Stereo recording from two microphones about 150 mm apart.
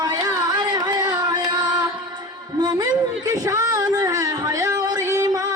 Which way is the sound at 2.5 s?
25° right (ahead or behind).